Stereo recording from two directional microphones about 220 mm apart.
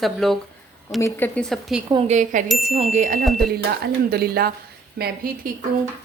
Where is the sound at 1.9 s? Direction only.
25° right (ahead or behind).